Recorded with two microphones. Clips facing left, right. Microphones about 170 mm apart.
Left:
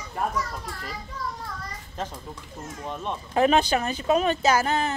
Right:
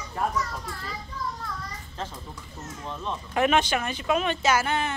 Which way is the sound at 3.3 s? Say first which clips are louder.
Left 3 dB; 35° left (ahead or behind).